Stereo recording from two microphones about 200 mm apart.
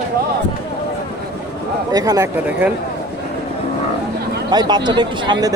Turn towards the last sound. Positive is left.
turn(degrees=-20)  # may be behind; listen again after turning